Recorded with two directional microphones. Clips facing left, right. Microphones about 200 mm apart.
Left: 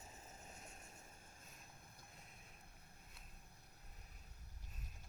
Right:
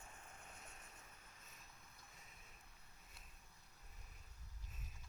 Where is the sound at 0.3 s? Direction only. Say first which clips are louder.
Left 2 dB; 40° left (ahead or behind).